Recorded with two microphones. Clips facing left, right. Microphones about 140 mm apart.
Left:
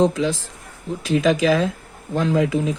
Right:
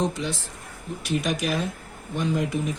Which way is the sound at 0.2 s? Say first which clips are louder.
Left 8 dB; 90° left.